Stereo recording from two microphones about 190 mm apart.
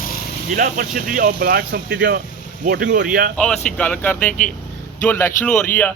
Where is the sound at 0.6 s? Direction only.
45° right (ahead or behind).